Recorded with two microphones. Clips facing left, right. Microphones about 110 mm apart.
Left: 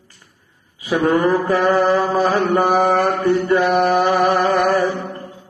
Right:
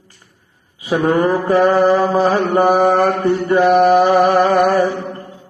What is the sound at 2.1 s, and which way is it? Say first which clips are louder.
Mantra: right 2 dB; 35° right (ahead or behind).